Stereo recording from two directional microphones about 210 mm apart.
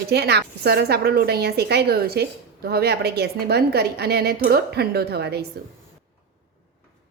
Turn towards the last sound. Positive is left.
turn(degrees=-50)  # may be behind; listen again after turning